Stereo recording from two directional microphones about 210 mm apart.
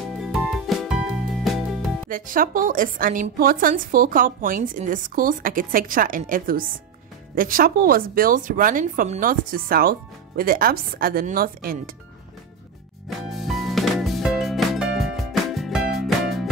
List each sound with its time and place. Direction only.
0.0 s music: centre (ahead or behind)
2.0 s a woman's voice: 40° right (ahead or behind)
13.4 s music: centre (ahead or behind)